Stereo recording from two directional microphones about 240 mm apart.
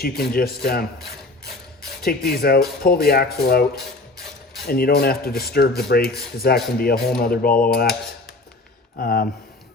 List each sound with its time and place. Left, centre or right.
0.0 s speech: left
4.7 s speech: left
9.0 s speech: left